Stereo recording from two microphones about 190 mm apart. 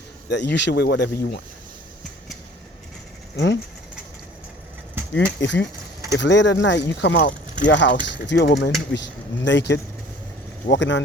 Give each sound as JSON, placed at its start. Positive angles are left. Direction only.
{"t": 0.3, "sound": "speech", "side_deg": 65}
{"t": 3.3, "sound": "speech", "side_deg": 65}
{"t": 5.1, "sound": "speech", "side_deg": 70}